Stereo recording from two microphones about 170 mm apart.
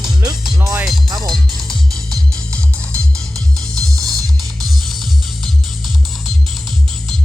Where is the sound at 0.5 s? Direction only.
15° right (ahead or behind).